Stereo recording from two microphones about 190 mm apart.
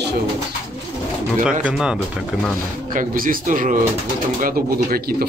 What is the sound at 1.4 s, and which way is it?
Speech, 5° right (ahead or behind).